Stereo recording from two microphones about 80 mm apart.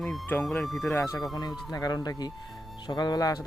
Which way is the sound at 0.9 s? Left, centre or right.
Left.